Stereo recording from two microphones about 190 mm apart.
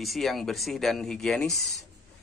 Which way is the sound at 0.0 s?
Centre (ahead or behind).